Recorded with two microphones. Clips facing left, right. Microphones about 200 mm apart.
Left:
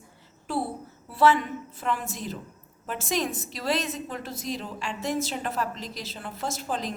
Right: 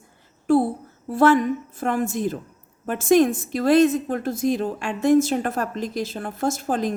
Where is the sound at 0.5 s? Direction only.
50° right (ahead or behind).